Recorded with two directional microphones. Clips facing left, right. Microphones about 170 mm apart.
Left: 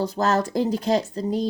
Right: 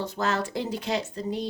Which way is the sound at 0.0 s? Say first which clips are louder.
Left 6 dB; 40° left (ahead or behind).